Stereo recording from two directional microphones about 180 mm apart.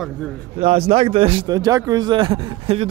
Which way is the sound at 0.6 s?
35° right (ahead or behind).